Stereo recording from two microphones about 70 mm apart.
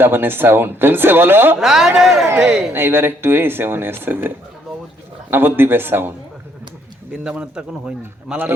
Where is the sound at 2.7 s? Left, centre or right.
Right.